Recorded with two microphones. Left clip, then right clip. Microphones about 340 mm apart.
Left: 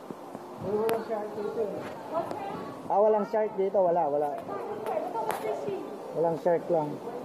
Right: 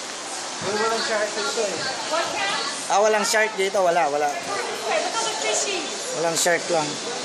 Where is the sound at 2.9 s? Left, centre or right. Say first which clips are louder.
Right 5 dB; right.